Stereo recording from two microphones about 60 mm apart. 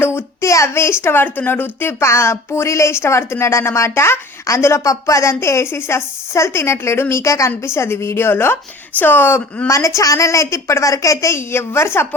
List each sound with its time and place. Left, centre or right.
0.0 s a sound: left
0.4 s a woman's voice: left
2.0 s a woman's voice: left
4.4 s a woman's voice: left
4.8 s a woman's voice: left
9.6 s a woman's voice: left
11.3 s a woman's voice: left